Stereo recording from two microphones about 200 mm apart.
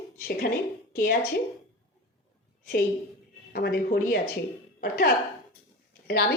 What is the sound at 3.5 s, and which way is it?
A woman's voice, 50° left (ahead or behind).